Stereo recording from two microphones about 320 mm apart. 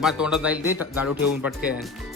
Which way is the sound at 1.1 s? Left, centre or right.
Left.